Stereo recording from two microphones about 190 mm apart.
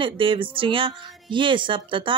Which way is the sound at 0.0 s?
25° right (ahead or behind).